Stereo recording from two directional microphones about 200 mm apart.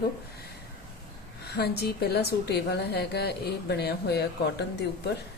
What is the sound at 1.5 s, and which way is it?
A woman's voice, 55° left (ahead or behind).